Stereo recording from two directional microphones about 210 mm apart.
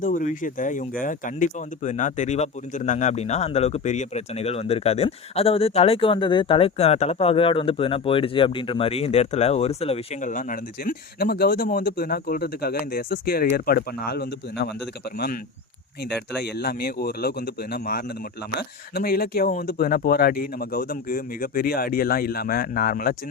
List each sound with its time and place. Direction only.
0.0 s speech: 35° left (ahead or behind)
16.4 s speech: 50° left (ahead or behind)